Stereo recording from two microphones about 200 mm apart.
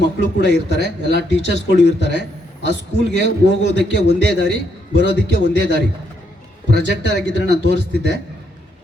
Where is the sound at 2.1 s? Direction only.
60° left (ahead or behind).